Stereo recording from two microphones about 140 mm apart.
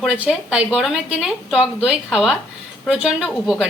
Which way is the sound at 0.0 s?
5° right (ahead or behind).